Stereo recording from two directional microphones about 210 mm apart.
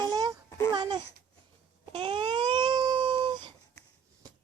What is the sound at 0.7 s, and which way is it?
Babbling, 20° right (ahead or behind).